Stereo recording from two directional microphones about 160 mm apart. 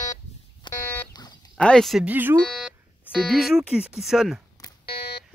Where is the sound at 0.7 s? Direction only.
30° left (ahead or behind).